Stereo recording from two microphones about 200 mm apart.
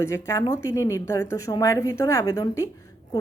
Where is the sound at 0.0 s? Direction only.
15° left (ahead or behind).